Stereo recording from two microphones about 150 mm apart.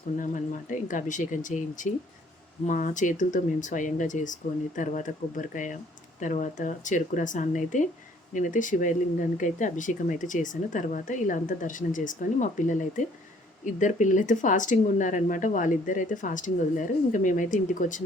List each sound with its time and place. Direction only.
0.2 s speech: 60° left (ahead or behind)